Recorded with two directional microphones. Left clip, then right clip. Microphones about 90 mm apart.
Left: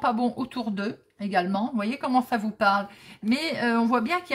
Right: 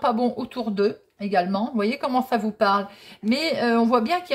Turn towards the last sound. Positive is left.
turn(degrees=-20)  # may be behind; listen again after turning